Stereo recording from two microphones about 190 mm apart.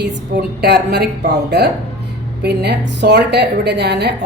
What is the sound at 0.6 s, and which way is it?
A woman's voice, 60° right (ahead or behind).